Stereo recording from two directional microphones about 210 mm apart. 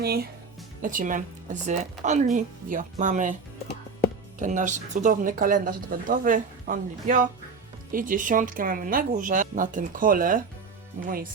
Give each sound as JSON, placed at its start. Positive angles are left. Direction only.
{"t": 0.0, "sound": "speech", "side_deg": -50}
{"t": 4.4, "sound": "speech", "side_deg": -35}